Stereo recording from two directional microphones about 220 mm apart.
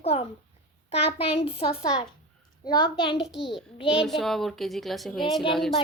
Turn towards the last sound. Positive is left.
turn(degrees=0)  # may be behind; listen again after turning